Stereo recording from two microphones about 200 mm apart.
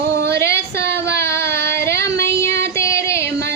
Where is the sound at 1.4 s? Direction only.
55° right (ahead or behind).